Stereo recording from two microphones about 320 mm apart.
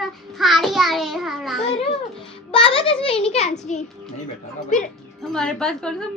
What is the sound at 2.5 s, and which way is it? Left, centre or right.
A child's voice, centre.